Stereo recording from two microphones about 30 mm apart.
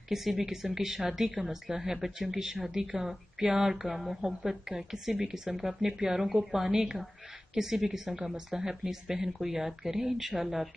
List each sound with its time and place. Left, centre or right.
0.1 s speech: centre
3.8 s speech: centre